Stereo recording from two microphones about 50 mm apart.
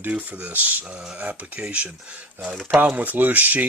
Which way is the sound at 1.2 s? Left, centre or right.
Right.